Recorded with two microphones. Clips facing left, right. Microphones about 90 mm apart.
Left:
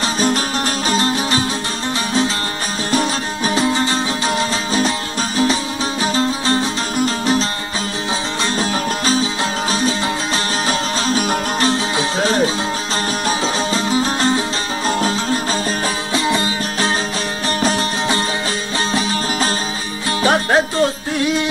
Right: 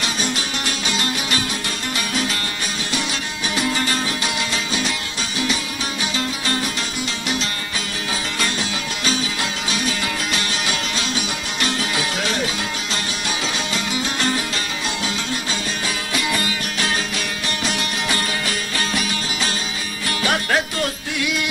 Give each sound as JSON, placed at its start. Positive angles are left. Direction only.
{"t": 0.8, "sound": "music", "side_deg": 35}
{"t": 2.9, "sound": "music", "side_deg": 40}
{"t": 6.1, "sound": "music", "side_deg": 30}
{"t": 8.5, "sound": "music", "side_deg": 35}
{"t": 13.7, "sound": "music", "side_deg": 35}
{"t": 16.1, "sound": "music", "side_deg": 30}
{"t": 20.2, "sound": "music", "side_deg": 30}